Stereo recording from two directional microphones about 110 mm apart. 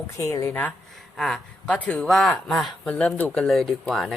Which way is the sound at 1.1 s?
5° left (ahead or behind).